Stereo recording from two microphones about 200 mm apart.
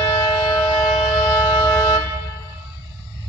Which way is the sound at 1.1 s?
15° left (ahead or behind).